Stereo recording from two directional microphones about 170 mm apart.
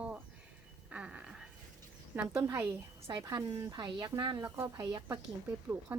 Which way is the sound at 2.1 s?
10° right (ahead or behind).